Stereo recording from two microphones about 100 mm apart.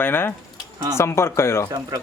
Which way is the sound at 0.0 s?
20° left (ahead or behind).